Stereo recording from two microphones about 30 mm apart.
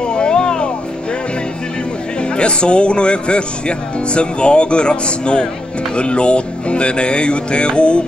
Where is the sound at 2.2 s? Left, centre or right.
Left.